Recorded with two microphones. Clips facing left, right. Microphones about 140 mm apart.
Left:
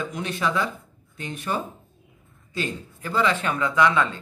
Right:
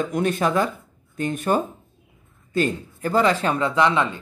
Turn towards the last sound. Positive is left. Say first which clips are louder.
# right 1 dB
turn(degrees=-20)  # may be behind; listen again after turning